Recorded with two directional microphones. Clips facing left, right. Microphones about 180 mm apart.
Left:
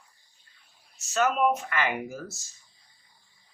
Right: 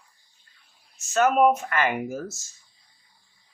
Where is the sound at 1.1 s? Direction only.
50° right (ahead or behind).